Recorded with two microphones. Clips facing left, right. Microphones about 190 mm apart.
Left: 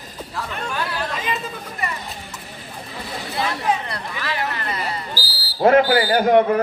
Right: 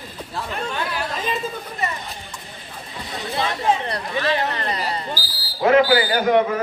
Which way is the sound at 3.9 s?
30° right (ahead or behind).